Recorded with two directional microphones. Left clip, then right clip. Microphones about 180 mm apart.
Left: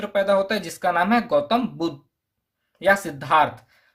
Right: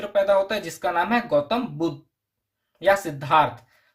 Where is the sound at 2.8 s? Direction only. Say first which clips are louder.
Left 1 dB; 35° left (ahead or behind).